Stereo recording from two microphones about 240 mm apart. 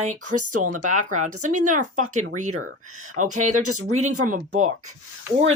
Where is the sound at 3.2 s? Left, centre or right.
Right.